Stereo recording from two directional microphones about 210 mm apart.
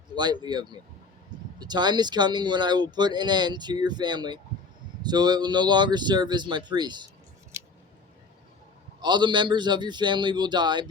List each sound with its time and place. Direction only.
0.1 s speech: 20° right (ahead or behind)
7.5 s scissors: 10° right (ahead or behind)
9.0 s speech: 20° right (ahead or behind)